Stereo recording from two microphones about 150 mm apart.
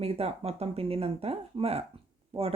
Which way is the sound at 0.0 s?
40° right (ahead or behind).